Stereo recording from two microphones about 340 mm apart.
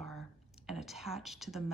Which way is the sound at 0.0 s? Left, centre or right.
Centre.